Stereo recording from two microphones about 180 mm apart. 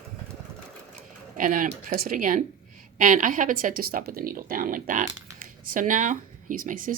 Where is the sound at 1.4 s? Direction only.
45° right (ahead or behind).